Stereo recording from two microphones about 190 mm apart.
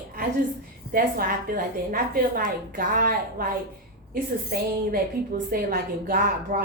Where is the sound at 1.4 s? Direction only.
50° right (ahead or behind).